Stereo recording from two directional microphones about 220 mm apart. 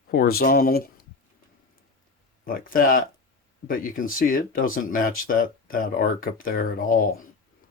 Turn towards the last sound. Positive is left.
turn(degrees=40)  # may be behind; listen again after turning